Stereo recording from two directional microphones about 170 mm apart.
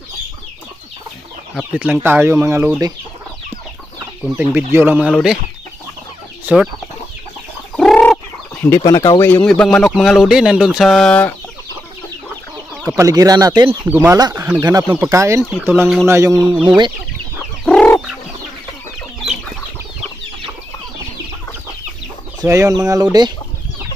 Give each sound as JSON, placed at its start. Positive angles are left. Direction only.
{"t": 1.5, "sound": "speech", "side_deg": -5}
{"t": 4.4, "sound": "speech", "side_deg": -10}
{"t": 6.4, "sound": "speech", "side_deg": -5}
{"t": 7.7, "sound": "chicken", "side_deg": 5}
{"t": 8.6, "sound": "speech", "side_deg": 15}
{"t": 9.3, "sound": "speech", "side_deg": 5}
{"t": 12.9, "sound": "speech", "side_deg": -20}
{"t": 17.6, "sound": "chicken", "side_deg": 10}
{"t": 22.4, "sound": "speech", "side_deg": -20}